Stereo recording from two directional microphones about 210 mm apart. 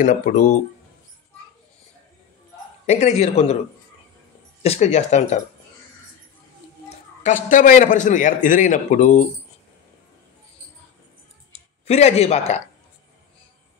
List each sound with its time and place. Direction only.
0.0 s a man's voice: 40° left (ahead or behind)
2.9 s a man's voice: 30° left (ahead or behind)
4.6 s a man's voice: 30° left (ahead or behind)
7.2 s a man's voice: 40° left (ahead or behind)
11.5 s speech: 30° left (ahead or behind)